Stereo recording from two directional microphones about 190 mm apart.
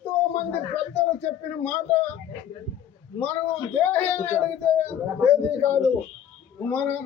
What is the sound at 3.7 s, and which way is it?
A man's voice, 10° left (ahead or behind).